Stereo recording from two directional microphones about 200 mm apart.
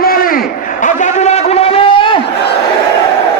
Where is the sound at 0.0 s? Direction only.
45° left (ahead or behind); by 2.2 s 25° left (ahead or behind).